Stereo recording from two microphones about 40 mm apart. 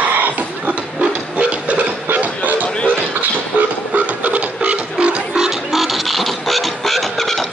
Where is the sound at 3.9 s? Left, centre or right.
Right.